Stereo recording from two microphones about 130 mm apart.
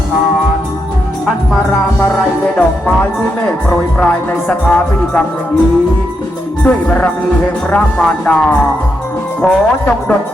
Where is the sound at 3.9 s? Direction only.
5° left (ahead or behind).